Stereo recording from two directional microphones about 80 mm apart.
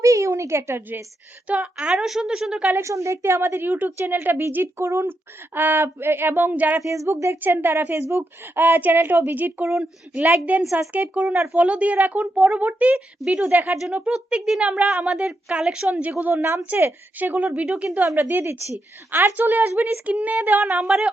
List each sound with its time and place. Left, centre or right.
0.0 s a woman's voice: right
1.5 s a woman's voice: centre
2.7 s a woman's voice: right
6.7 s a woman's voice: right
10.6 s speech: centre
10.9 s a woman's voice: centre
13.7 s a woman's voice: centre
16.3 s a woman's voice: right
17.7 s a woman's voice: centre
18.1 s a woman's voice: right
20.7 s a woman's voice: centre